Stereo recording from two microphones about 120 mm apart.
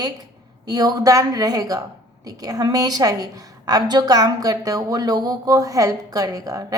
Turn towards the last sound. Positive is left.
turn(degrees=-30)  # may be behind; listen again after turning